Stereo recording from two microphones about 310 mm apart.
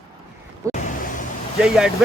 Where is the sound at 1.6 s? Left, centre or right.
Centre.